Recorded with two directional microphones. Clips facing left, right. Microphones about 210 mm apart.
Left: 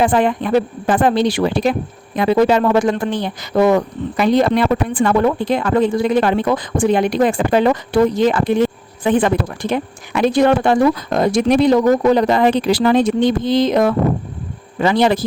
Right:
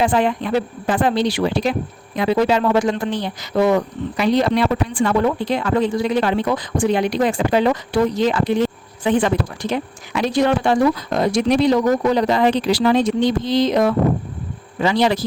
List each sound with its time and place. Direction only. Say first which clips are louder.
0.0 s speech: left 3 dB; 50° left (ahead or behind)